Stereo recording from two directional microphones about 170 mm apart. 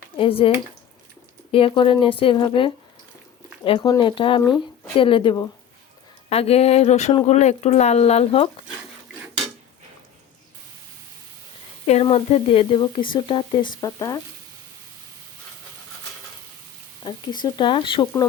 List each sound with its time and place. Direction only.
0.2 s speech: 30° left (ahead or behind)
12.0 s speech: 35° left (ahead or behind)
17.0 s speech: 25° left (ahead or behind)